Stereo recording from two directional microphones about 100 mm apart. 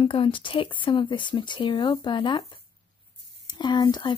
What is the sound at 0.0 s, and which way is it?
Speech, 65° left (ahead or behind).